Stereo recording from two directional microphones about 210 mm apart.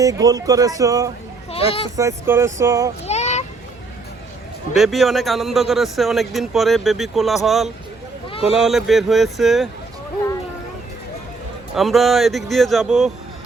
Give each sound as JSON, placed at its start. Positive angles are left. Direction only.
{"t": 0.0, "sound": "speech", "side_deg": -15}
{"t": 1.5, "sound": "a child's voice", "side_deg": 25}
{"t": 2.0, "sound": "speech", "side_deg": -15}
{"t": 3.1, "sound": "a sound", "side_deg": 30}
{"t": 4.7, "sound": "speech", "side_deg": 0}
{"t": 8.3, "sound": "a sound", "side_deg": 25}
{"t": 8.5, "sound": "speech", "side_deg": 0}
{"t": 11.7, "sound": "speech", "side_deg": 0}